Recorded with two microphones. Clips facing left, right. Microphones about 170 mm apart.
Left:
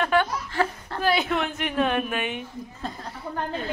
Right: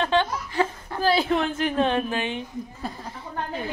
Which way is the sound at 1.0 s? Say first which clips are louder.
Right 2 dB; 30° right (ahead or behind).